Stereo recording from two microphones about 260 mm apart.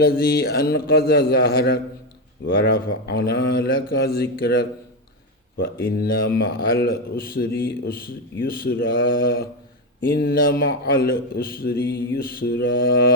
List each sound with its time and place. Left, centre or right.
0.0 s a man's voice: left
5.8 s a man's voice: left